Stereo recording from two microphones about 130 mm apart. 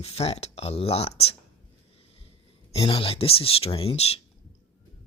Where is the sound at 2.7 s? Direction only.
45° left (ahead or behind).